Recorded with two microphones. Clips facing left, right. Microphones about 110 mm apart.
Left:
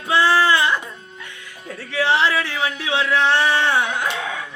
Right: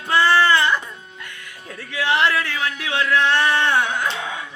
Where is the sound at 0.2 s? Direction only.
5° left (ahead or behind).